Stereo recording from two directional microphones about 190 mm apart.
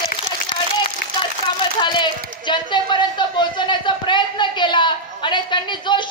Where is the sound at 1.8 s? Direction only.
25° left (ahead or behind).